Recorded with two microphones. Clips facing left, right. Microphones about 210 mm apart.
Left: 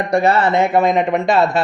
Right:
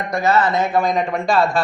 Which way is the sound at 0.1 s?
30° left (ahead or behind).